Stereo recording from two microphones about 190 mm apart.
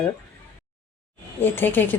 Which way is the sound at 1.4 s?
10° left (ahead or behind).